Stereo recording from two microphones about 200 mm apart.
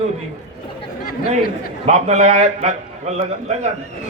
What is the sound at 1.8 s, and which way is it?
A man's voice, 35° right (ahead or behind).